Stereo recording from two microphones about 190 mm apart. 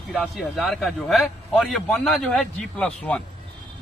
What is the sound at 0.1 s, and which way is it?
A man's voice, centre (ahead or behind).